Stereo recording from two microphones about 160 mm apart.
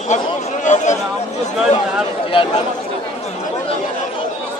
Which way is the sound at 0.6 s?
50° left (ahead or behind).